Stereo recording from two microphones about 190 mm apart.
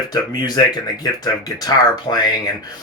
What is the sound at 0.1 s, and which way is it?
Speech, 20° left (ahead or behind).